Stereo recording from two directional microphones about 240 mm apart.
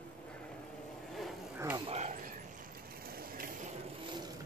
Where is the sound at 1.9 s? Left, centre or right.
Right.